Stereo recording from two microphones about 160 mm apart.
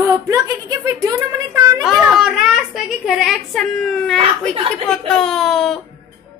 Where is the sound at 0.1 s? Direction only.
20° right (ahead or behind).